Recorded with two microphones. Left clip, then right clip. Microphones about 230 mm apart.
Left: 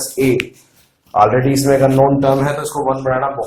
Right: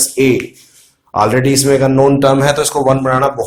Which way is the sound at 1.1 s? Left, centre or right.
Right.